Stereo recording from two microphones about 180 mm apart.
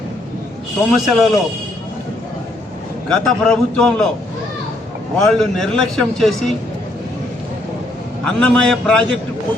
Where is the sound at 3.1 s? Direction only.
5° left (ahead or behind).